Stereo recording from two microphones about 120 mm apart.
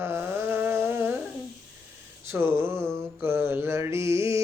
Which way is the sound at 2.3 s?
20° right (ahead or behind).